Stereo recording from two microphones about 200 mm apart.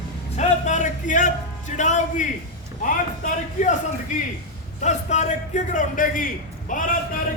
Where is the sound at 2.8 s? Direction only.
40° left (ahead or behind).